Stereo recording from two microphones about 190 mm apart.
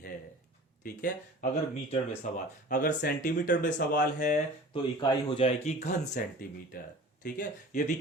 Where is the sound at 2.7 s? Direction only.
45° left (ahead or behind).